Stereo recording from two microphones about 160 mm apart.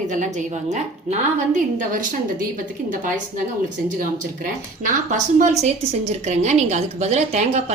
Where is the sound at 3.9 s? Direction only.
60° right (ahead or behind).